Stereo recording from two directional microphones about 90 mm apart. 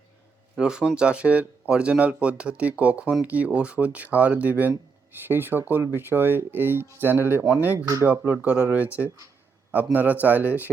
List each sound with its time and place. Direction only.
0.5 s speech: 10° right (ahead or behind)